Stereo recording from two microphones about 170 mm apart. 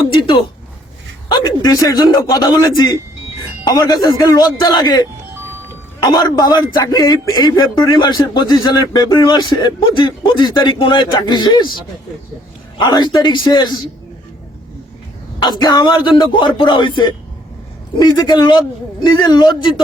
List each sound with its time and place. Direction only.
0.1 s a sound: 30° left (ahead or behind)
1.3 s a man's voice: 25° left (ahead or behind)
12.8 s a man's voice: 25° left (ahead or behind)
15.4 s a man's voice: 25° left (ahead or behind)
18.1 s a man's voice: 25° left (ahead or behind)